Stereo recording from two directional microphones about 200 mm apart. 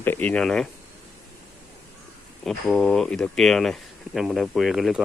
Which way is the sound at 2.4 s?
Centre (ahead or behind).